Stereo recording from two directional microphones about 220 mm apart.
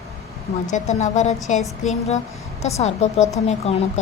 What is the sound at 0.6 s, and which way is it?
A woman's voice, 30° left (ahead or behind).